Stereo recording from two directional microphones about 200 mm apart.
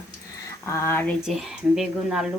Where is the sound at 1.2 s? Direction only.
Centre (ahead or behind).